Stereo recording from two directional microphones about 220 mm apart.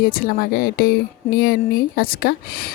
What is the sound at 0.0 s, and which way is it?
Speech, 40° left (ahead or behind).